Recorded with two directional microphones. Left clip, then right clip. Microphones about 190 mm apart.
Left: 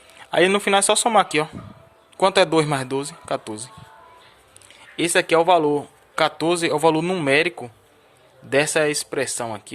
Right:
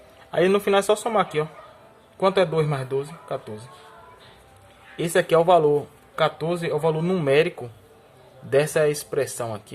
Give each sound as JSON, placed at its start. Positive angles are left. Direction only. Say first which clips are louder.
{"t": 0.2, "sound": "a man's voice", "louder": "left 2 dB", "side_deg": 40}
{"t": 4.9, "sound": "speech", "louder": "left 2 dB", "side_deg": 40}
{"t": 6.2, "sound": "a man's voice", "louder": "left 3 dB", "side_deg": 55}